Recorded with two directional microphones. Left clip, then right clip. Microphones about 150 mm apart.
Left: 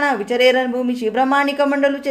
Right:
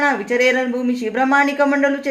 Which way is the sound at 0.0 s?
20° left (ahead or behind).